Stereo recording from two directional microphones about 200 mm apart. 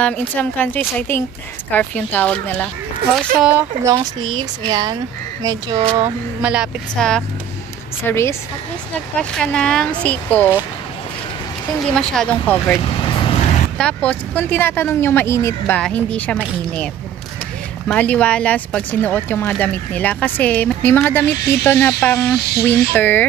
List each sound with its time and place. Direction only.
0.0 s speech: 10° left (ahead or behind)
3.8 s speech: 15° right (ahead or behind)
6.4 s speech: 5° right (ahead or behind)
11.8 s speech: 5° left (ahead or behind)
12.8 s vehicle: 25° left (ahead or behind)
13.7 s speech: 5° left (ahead or behind)
17.8 s speech: 5° left (ahead or behind)